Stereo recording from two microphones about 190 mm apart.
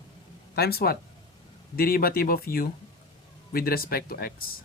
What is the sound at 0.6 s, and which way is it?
Speech, 55° left (ahead or behind).